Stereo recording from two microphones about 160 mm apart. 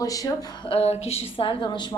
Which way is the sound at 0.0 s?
20° left (ahead or behind).